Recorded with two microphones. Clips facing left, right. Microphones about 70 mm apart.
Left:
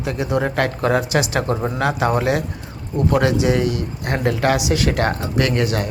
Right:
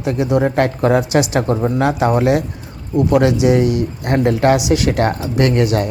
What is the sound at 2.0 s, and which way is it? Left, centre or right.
Speech, right.